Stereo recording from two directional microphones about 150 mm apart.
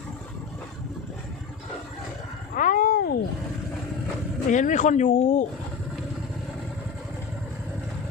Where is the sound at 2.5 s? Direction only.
65° left (ahead or behind).